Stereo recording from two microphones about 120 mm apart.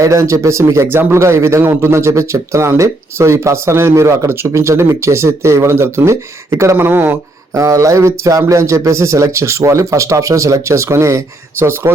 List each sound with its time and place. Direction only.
0.0 s speech: 25° right (ahead or behind)